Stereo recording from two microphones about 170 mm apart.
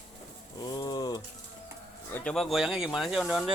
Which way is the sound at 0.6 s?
25° left (ahead or behind).